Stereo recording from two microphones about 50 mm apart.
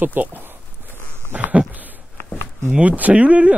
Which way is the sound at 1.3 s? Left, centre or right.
Right.